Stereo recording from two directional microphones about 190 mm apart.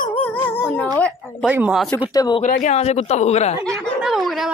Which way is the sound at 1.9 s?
20° left (ahead or behind).